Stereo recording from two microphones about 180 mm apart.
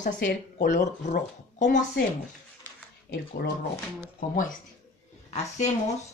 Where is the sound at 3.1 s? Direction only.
60° left (ahead or behind).